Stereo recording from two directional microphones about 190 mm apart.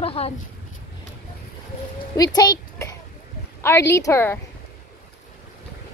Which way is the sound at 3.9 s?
15° left (ahead or behind).